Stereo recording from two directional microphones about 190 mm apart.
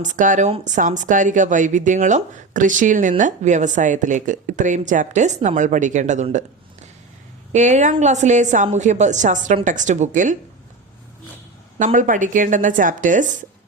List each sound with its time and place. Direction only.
0.0 s a woman's voice: 40° right (ahead or behind)
7.5 s a woman's voice: 40° right (ahead or behind)
11.8 s speech: 40° right (ahead or behind)